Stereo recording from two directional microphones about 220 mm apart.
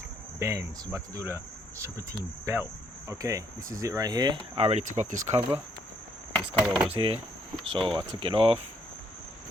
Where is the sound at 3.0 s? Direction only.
15° right (ahead or behind); by 5.2 s 35° right (ahead or behind).